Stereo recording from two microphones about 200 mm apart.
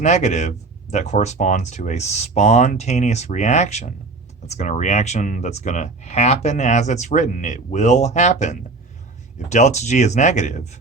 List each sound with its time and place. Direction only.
0.0 s speech: 35° left (ahead or behind)